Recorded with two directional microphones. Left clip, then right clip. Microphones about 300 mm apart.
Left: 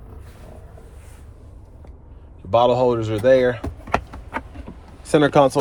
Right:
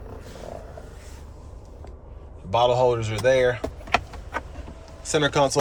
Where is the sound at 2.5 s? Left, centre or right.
Centre.